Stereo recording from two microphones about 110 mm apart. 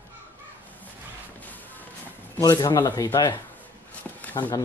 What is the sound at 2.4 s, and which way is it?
Speech, 35° left (ahead or behind).